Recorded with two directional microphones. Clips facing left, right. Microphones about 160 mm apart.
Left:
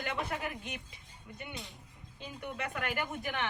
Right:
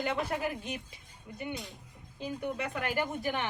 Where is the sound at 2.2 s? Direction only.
40° right (ahead or behind).